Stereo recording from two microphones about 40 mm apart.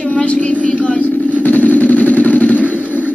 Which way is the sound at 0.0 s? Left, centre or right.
Left.